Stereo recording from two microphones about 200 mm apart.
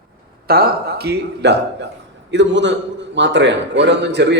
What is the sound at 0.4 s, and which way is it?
A man's voice, 50° right (ahead or behind).